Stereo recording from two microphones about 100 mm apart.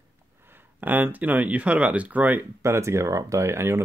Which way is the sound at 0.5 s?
20° right (ahead or behind).